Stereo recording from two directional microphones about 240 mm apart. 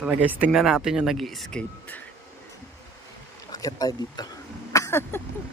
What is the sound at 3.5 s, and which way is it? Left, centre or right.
Speech, centre.